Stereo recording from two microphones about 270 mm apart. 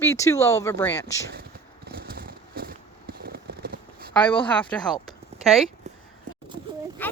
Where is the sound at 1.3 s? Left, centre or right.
Right.